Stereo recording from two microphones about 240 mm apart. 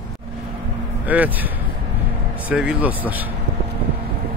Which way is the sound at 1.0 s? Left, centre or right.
Centre.